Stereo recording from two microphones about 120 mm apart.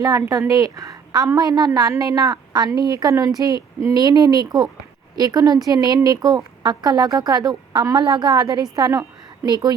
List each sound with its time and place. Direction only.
0.0 s a woman's voice: 25° right (ahead or behind)